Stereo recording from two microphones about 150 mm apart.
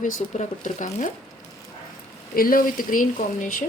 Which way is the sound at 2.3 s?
70° left (ahead or behind).